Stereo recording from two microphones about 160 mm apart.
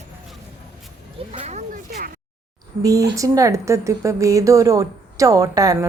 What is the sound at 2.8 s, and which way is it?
A woman's voice, 20° right (ahead or behind).